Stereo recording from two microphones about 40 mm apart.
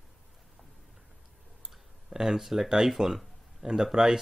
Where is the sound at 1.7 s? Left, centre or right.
Centre.